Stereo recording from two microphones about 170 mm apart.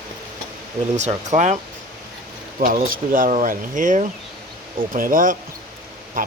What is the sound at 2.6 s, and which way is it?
Speech, 60° right (ahead or behind).